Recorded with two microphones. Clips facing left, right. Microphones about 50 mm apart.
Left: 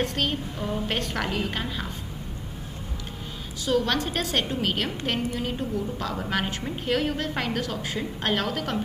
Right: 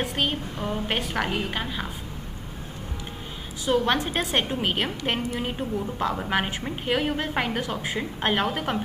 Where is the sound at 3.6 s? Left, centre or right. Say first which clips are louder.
Right 1 dB; right.